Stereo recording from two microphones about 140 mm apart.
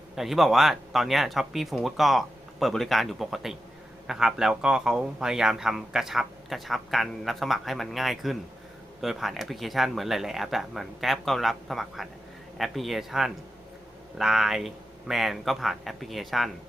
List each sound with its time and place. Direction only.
0.2 s speech: centre (ahead or behind)